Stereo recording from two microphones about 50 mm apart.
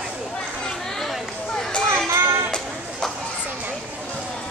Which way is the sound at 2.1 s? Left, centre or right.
Right.